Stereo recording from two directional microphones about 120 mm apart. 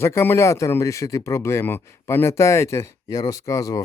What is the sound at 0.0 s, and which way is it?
Speech, 20° left (ahead or behind).